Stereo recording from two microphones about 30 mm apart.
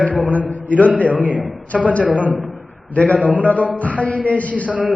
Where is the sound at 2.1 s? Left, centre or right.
Right.